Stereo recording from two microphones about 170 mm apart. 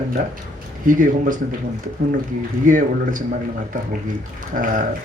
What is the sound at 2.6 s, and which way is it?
Speech, 50° right (ahead or behind).